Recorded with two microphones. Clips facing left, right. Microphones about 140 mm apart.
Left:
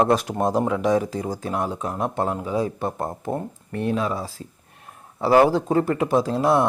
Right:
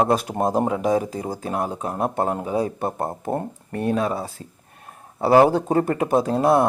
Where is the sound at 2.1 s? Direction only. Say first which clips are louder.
Right 1 dB; 50° right (ahead or behind).